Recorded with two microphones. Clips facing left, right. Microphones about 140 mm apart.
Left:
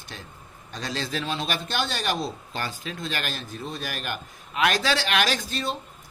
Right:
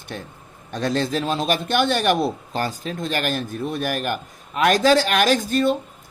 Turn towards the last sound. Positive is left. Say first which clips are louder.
# right 10 dB
turn(degrees=-50)  # may be behind; listen again after turning